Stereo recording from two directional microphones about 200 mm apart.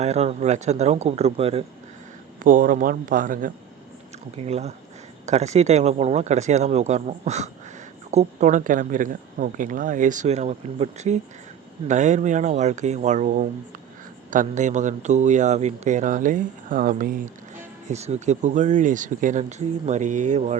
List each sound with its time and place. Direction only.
0.0 s speech: 35° right (ahead or behind)
2.4 s a man's voice: 40° right (ahead or behind)
4.4 s speech: 30° right (ahead or behind)
17.8 s speech: 35° right (ahead or behind)